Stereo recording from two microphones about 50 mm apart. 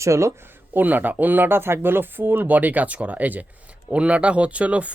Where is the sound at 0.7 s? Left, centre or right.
Right.